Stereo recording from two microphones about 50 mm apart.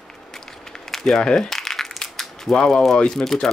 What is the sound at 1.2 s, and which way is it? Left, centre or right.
Crumpling, centre.